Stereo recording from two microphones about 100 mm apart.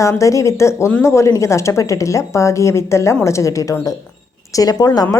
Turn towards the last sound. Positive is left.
turn(degrees=40)  # may be behind; listen again after turning